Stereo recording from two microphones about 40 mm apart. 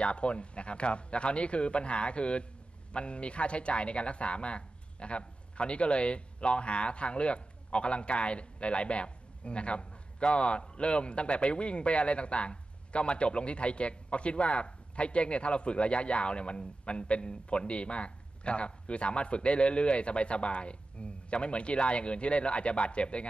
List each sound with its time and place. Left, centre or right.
0.0 s speech: left